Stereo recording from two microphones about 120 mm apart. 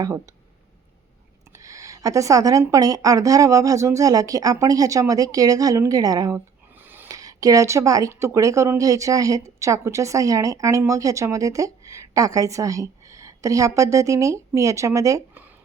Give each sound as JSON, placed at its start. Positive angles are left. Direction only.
{"t": 1.5, "sound": "speech", "side_deg": -25}
{"t": 6.8, "sound": "a sound", "side_deg": -15}
{"t": 7.1, "sound": "speech", "side_deg": -30}